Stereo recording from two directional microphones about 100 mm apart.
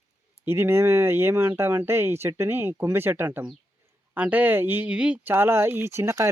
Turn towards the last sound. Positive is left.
turn(degrees=-30)  # may be behind; listen again after turning